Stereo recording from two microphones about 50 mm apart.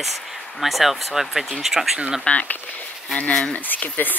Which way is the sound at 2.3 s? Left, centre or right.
Left.